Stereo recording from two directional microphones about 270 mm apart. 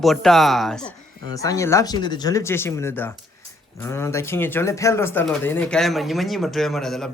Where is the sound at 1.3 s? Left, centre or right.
Centre.